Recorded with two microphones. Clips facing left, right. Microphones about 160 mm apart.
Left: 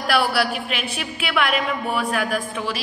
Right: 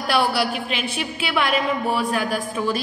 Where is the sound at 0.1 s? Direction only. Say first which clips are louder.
Even; 25° right (ahead or behind).